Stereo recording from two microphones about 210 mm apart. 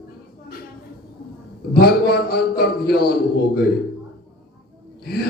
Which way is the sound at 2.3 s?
45° left (ahead or behind).